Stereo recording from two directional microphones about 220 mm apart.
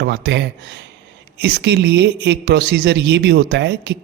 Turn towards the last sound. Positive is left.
turn(degrees=-50)  # may be behind; listen again after turning